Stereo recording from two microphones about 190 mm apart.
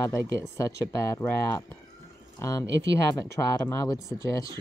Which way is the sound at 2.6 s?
70° right (ahead or behind).